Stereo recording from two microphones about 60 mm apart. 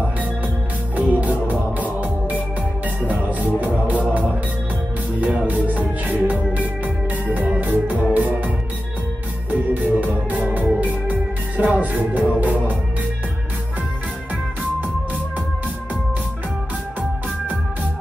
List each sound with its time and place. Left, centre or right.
0.9 s music: right
5.2 s music: right